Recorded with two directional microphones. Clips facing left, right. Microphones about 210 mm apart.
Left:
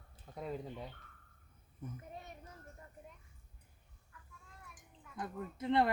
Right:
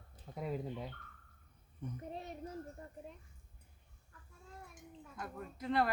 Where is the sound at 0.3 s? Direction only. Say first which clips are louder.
Right 2 dB; 5° right (ahead or behind).